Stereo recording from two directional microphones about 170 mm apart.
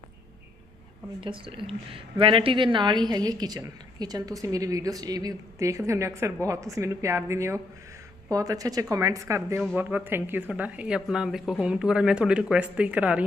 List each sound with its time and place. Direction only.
1.2 s a woman's voice: 30° right (ahead or behind); by 13.2 s 5° right (ahead or behind)